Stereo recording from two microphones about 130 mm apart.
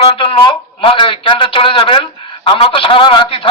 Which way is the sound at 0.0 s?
45° left (ahead or behind).